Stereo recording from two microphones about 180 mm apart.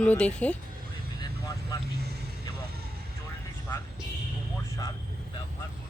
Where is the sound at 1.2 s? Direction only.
20° left (ahead or behind).